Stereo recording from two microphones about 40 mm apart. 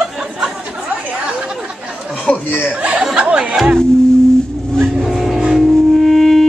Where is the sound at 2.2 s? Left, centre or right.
Left.